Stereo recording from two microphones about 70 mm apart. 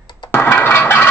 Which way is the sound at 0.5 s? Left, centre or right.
Left.